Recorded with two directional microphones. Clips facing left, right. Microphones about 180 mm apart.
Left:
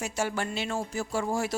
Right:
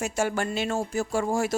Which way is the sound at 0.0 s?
50° right (ahead or behind).